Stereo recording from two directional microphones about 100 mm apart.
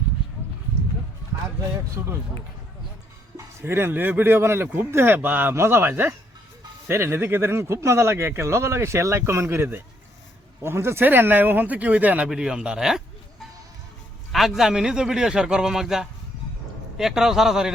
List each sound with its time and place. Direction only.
2.0 s speech: 25° right (ahead or behind)
3.3 s speech: 25° right (ahead or behind); by 13.0 s 5° right (ahead or behind)
14.3 s a man's voice: centre (ahead or behind)